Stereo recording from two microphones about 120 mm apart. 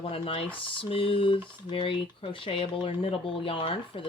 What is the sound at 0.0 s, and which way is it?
Speech, 50° left (ahead or behind).